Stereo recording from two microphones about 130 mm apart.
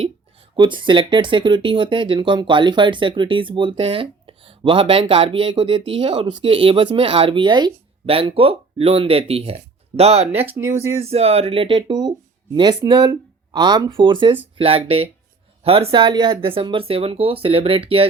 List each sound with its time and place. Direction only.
0.5 s speech: 35° right (ahead or behind)
10.5 s speech: 20° right (ahead or behind)
11.0 s speech: 50° right (ahead or behind)